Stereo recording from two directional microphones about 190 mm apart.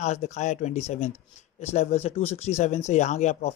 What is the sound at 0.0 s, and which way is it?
Speech, 35° left (ahead or behind).